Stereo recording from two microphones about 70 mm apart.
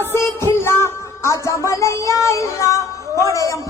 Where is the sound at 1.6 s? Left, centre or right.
Left.